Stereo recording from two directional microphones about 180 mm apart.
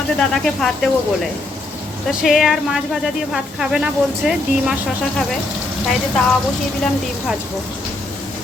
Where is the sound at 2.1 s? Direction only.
5° right (ahead or behind).